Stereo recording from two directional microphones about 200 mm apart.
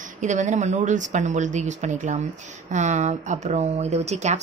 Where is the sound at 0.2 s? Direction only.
35° right (ahead or behind).